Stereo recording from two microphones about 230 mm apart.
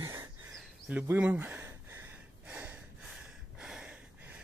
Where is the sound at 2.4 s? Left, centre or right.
Centre.